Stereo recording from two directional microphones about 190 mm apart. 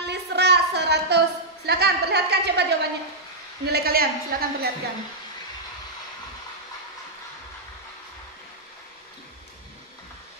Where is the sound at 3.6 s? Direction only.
55° right (ahead or behind).